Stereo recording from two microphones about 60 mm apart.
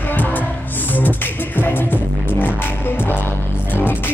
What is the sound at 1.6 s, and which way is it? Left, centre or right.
Music, left.